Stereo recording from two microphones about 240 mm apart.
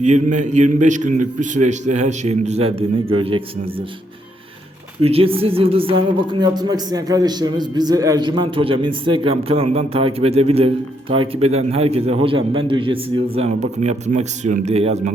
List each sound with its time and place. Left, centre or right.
0.0 s a man's voice: right
4.9 s speech: right